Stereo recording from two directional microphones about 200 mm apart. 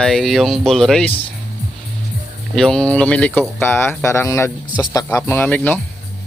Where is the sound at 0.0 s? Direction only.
Centre (ahead or behind).